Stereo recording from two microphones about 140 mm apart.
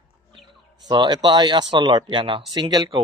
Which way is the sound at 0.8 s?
30° right (ahead or behind).